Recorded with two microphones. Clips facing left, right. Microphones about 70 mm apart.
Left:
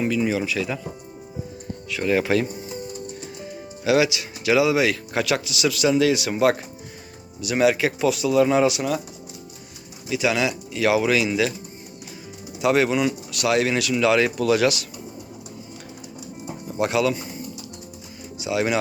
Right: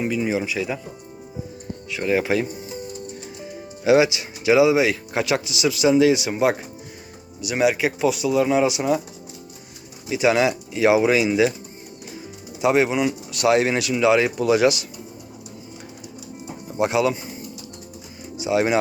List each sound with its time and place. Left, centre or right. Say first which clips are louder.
0.0 s speech: even; centre
1.9 s speech: even; centre
3.8 s speech: right 3 dB; right; by 8.7 s centre
8.7 s speech: right 3 dB; right
10.1 s speech: right 4 dB; right
10.8 s speech: right 3 dB; right
12.6 s speech: right 1 dB; right
16.6 s speech: right 1 dB; centre
18.3 s speech: right 3 dB; right